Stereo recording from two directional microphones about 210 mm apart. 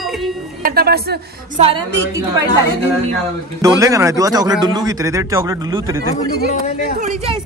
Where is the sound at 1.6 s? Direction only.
25° right (ahead or behind).